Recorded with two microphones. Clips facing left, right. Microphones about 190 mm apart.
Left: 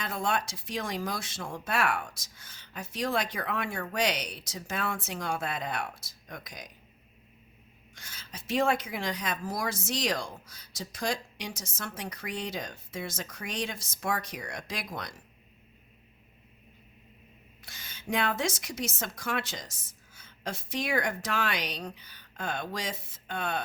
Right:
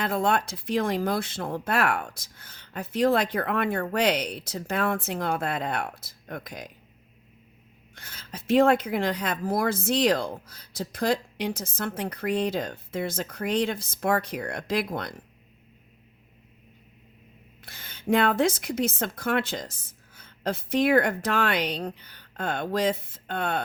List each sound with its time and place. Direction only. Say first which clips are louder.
0.0 s speech: right 6 dB; 60° right (ahead or behind)
7.9 s speech: right 5 dB; 55° right (ahead or behind)
17.6 s a woman's voice: right 6 dB; 55° right (ahead or behind)